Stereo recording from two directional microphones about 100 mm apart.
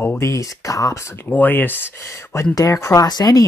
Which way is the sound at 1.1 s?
20° left (ahead or behind).